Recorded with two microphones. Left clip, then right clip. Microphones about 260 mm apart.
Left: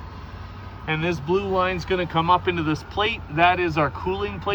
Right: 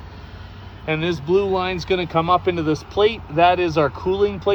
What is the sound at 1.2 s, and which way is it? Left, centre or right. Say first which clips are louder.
Speech: right 8 dB; right.